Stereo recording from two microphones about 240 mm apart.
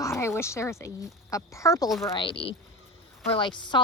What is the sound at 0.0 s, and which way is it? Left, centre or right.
Speech, centre.